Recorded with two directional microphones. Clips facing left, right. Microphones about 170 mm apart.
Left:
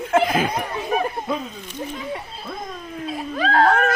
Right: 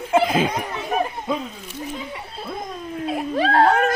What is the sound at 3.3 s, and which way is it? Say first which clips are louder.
Giggle: right 1 dB; 30° right (ahead or behind).